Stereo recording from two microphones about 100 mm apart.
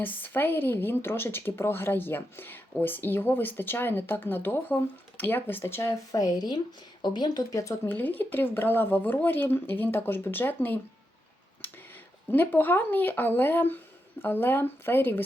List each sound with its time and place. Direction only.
0.0 s speech: 20° left (ahead or behind)
6.1 s speech: 35° left (ahead or behind)
7.5 s speech: 30° left (ahead or behind)
7.9 s speech: 20° left (ahead or behind)
12.3 s speech: 20° left (ahead or behind)